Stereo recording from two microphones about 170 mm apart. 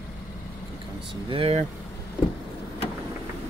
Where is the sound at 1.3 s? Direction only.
35° right (ahead or behind).